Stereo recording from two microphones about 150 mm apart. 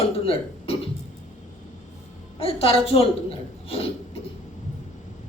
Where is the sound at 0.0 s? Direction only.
40° left (ahead or behind).